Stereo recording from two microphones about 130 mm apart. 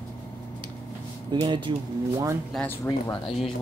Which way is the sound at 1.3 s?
40° right (ahead or behind).